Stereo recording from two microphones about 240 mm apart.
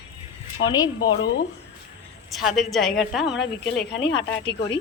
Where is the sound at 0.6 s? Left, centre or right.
Left.